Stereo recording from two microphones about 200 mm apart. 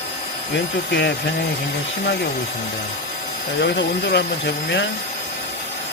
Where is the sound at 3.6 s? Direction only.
55° left (ahead or behind).